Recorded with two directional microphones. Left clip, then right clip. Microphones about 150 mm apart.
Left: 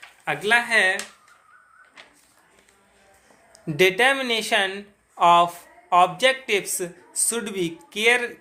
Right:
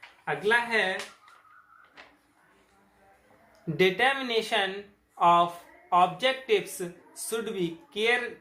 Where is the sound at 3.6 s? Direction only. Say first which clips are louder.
Left 6 dB; 40° left (ahead or behind).